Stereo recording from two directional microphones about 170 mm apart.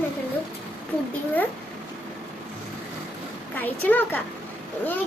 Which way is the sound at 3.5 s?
10° left (ahead or behind).